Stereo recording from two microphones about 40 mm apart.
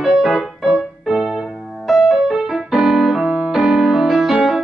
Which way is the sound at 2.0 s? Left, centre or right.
Centre.